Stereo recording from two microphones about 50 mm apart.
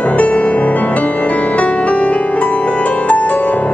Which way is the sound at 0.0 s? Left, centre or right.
Left.